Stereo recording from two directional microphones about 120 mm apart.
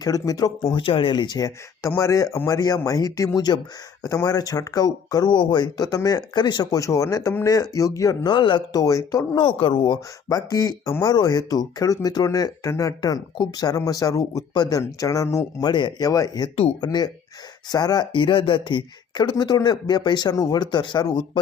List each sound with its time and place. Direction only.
0.0 s speech: 30° left (ahead or behind)
0.6 s speech: 45° left (ahead or behind); by 8.3 s 30° left (ahead or behind)
8.3 s speech: 40° left (ahead or behind)
8.8 s speech: 30° left (ahead or behind)
9.6 s speech: 45° left (ahead or behind)